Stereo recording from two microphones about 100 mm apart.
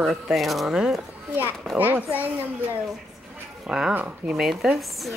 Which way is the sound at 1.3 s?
20° right (ahead or behind).